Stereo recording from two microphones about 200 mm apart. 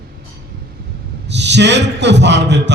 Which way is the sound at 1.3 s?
60° right (ahead or behind).